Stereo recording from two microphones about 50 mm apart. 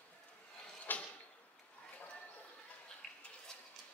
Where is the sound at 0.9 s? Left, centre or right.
Left.